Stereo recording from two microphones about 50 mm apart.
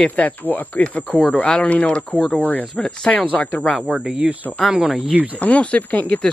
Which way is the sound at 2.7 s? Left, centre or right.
Centre.